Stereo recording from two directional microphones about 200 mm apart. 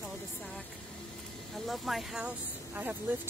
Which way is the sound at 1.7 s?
Centre (ahead or behind).